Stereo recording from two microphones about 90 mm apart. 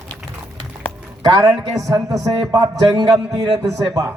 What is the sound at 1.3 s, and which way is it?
A man's voice, 45° right (ahead or behind).